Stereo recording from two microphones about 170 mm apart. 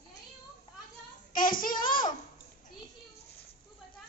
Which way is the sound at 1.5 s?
55° left (ahead or behind).